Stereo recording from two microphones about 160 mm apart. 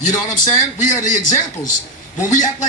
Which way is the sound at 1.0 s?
55° left (ahead or behind).